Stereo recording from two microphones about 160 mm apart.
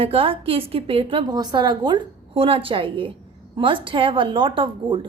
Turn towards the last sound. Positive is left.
turn(degrees=-30)  # may be behind; listen again after turning